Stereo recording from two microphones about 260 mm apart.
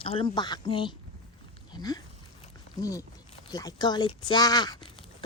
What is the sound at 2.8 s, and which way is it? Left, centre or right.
Speech, centre.